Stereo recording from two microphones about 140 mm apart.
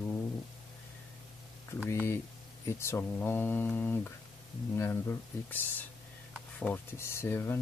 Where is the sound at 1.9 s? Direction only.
15° left (ahead or behind).